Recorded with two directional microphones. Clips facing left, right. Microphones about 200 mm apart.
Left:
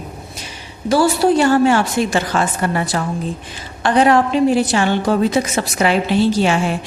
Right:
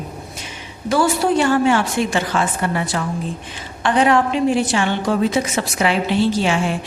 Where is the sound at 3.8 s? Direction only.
40° left (ahead or behind).